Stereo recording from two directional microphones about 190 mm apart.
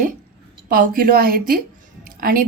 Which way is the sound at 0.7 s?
45° right (ahead or behind).